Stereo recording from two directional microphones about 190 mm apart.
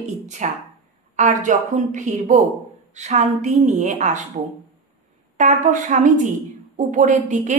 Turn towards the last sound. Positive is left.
turn(degrees=-40)  # may be behind; listen again after turning